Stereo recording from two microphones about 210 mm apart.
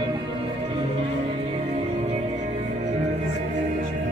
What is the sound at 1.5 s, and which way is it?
Music, 30° right (ahead or behind).